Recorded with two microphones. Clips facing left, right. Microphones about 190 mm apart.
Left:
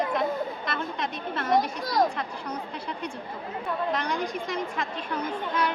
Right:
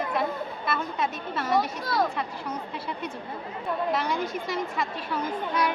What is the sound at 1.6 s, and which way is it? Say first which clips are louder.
Speech: left 1 dB; 45° left (ahead or behind).